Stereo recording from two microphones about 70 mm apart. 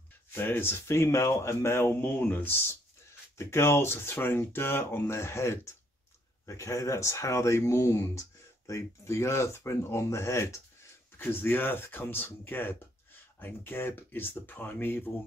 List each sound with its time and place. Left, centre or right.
0.3 s speech: left
11.1 s speech: left